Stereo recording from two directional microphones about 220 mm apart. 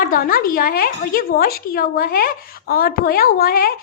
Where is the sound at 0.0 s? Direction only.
40° left (ahead or behind).